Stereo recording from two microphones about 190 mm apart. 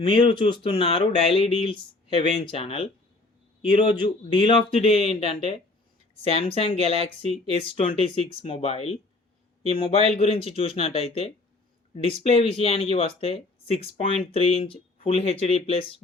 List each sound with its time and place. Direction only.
0.0 s speech: 25° left (ahead or behind)